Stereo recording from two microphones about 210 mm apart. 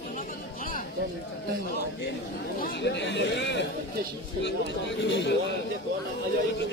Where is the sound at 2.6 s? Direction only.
55° left (ahead or behind).